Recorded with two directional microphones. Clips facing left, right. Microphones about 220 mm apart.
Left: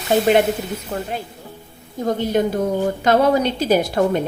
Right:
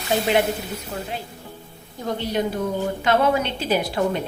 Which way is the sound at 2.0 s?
50° left (ahead or behind).